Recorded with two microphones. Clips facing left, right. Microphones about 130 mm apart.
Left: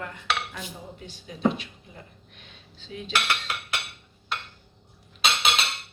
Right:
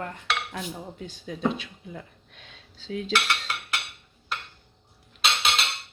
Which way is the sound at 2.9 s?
90° right.